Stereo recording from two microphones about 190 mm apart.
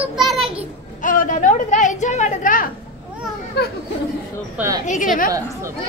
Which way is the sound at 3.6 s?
60° left (ahead or behind).